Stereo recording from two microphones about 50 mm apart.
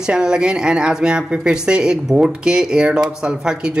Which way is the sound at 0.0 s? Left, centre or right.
Centre.